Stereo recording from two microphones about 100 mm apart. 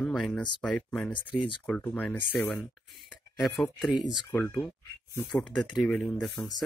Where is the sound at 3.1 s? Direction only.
Centre (ahead or behind).